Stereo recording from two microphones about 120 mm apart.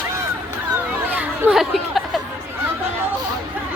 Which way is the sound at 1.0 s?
10° right (ahead or behind).